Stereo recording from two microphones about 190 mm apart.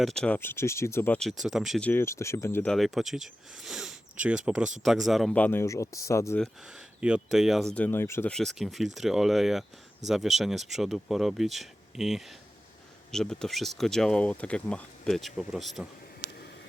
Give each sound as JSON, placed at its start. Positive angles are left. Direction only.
{"t": 0.0, "sound": "speech", "side_deg": 5}
{"t": 1.9, "sound": "speech", "side_deg": 15}
{"t": 2.7, "sound": "speech", "side_deg": 0}
{"t": 6.4, "sound": "speech", "side_deg": -5}